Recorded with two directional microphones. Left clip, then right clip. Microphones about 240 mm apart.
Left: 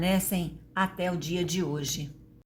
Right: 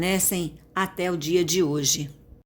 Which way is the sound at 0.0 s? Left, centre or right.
Right.